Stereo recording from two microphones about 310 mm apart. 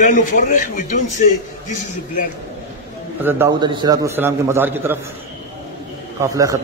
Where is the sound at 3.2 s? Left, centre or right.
Centre.